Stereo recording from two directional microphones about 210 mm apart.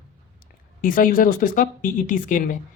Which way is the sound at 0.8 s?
40° left (ahead or behind).